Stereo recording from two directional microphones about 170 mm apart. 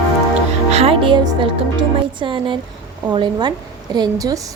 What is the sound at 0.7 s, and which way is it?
Music, 35° right (ahead or behind).